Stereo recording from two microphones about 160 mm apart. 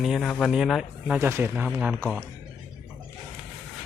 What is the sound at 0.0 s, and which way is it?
Speech, centre (ahead or behind).